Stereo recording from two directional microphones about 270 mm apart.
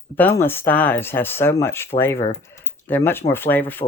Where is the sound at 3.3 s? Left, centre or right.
Centre.